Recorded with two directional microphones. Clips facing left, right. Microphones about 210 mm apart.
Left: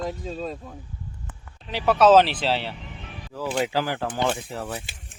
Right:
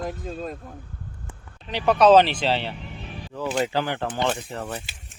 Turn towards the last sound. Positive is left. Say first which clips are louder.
# even
turn(degrees=5)  # may be behind; listen again after turning